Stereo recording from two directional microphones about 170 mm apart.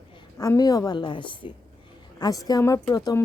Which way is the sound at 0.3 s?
20° left (ahead or behind).